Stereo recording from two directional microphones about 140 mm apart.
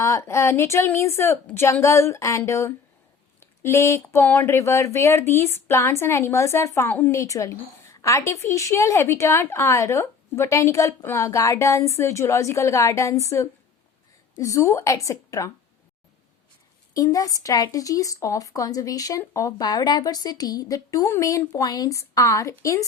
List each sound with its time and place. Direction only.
0.0 s speech: 20° left (ahead or behind)
16.9 s speech: 25° left (ahead or behind)